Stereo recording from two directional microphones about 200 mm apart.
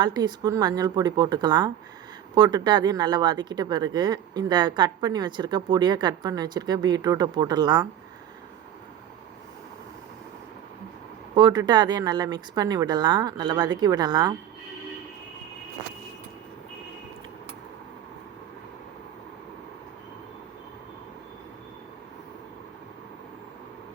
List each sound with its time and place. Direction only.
0.0 s speech: 20° right (ahead or behind)
11.3 s speech: 20° right (ahead or behind)